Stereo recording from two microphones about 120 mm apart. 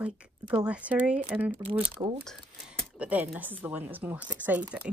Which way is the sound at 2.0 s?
50° right (ahead or behind).